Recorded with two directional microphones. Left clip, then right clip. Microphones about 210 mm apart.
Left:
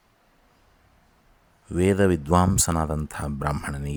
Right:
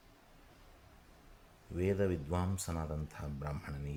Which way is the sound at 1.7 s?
40° left (ahead or behind).